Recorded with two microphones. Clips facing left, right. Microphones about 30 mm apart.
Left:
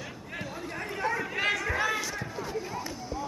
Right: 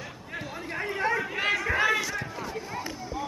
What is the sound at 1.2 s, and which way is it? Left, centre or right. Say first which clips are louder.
Chatter: right 1 dB; centre.